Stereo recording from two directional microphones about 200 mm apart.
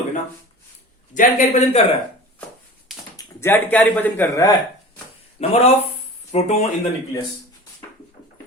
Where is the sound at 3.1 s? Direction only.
10° left (ahead or behind).